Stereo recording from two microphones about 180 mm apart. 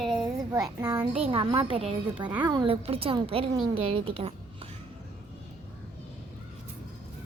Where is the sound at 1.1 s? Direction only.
30° right (ahead or behind).